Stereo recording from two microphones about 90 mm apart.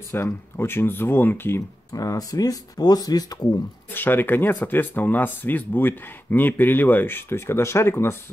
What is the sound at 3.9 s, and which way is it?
Speech, 20° left (ahead or behind).